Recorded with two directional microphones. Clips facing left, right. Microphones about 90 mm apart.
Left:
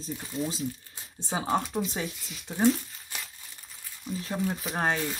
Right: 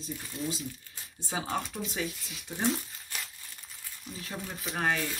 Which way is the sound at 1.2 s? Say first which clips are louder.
Left 5 dB; 30° left (ahead or behind).